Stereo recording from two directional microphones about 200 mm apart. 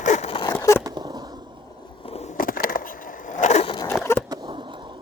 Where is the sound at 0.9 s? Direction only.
20° right (ahead or behind).